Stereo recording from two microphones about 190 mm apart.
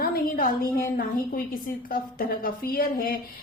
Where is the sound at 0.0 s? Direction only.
45° left (ahead or behind).